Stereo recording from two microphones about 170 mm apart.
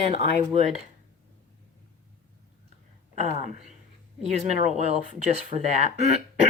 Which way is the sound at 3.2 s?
40° right (ahead or behind).